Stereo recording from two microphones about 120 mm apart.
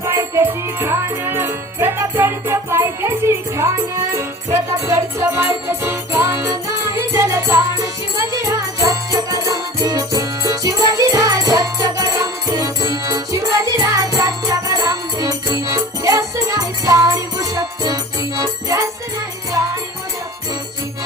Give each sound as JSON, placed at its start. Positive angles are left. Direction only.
{"t": 0.0, "sound": "music", "side_deg": -20}